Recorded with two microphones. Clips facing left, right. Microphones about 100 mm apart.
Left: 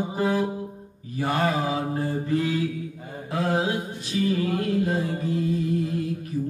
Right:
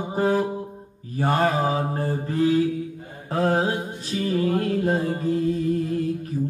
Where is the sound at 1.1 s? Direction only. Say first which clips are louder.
Right 3 dB; 35° right (ahead or behind).